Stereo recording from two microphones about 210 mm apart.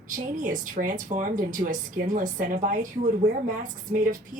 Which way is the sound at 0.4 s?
40° right (ahead or behind).